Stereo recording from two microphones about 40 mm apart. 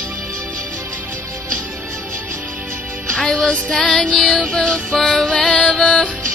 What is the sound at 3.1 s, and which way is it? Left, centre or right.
Music, left.